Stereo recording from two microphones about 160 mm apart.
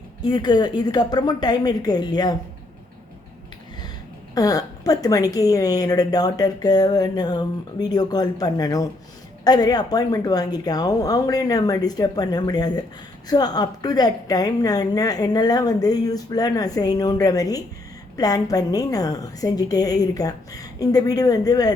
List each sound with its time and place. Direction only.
0.2 s a woman's voice: 25° left (ahead or behind)
4.4 s a woman's voice: 20° left (ahead or behind)